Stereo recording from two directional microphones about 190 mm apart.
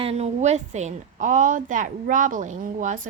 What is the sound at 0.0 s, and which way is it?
A woman's voice, 35° right (ahead or behind).